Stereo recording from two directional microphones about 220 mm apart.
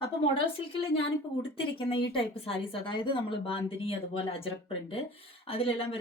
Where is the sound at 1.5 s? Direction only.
25° left (ahead or behind).